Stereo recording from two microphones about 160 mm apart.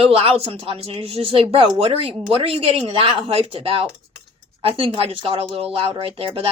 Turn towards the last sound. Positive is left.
turn(degrees=-35)  # may be behind; listen again after turning